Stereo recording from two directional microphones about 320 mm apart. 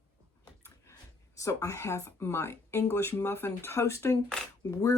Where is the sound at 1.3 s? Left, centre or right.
Centre.